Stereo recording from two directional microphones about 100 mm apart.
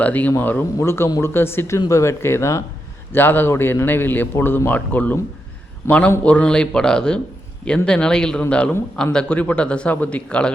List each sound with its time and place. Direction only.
0.0 s a man's voice: 15° left (ahead or behind)